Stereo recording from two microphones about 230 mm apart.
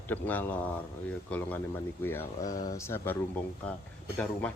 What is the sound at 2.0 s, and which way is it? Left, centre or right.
Speech, centre.